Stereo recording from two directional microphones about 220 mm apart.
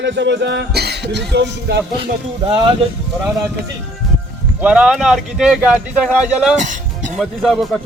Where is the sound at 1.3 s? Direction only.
50° right (ahead or behind).